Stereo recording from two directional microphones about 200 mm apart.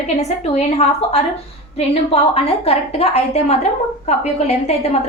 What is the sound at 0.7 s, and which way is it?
Speech, 30° left (ahead or behind).